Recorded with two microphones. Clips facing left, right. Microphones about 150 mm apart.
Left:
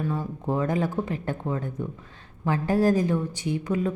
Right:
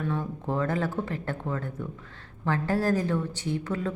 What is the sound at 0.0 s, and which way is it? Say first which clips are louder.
A woman's voice: left 2 dB; 10° left (ahead or behind).